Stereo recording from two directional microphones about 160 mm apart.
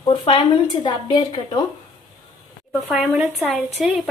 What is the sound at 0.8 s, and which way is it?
Speech, 25° left (ahead or behind).